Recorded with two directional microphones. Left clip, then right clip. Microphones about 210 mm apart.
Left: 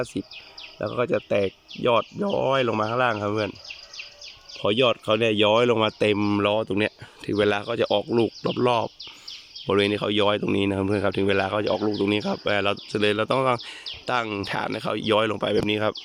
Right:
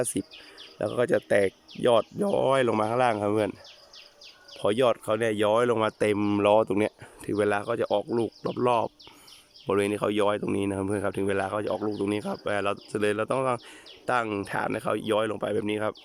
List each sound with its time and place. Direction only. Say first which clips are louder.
1.1 s speech: right 2 dB; centre (ahead or behind)
2.5 s speech: left 2 dB; 30° right (ahead or behind)
4.6 s speech: left 2 dB; 5° left (ahead or behind)